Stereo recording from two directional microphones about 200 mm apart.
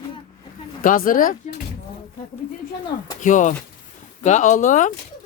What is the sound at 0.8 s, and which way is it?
Speech, 45° left (ahead or behind).